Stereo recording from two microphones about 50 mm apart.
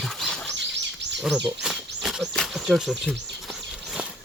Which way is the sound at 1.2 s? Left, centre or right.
Centre.